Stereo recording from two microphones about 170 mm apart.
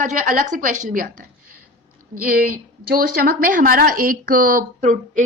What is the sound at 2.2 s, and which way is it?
A woman's voice, 55° right (ahead or behind).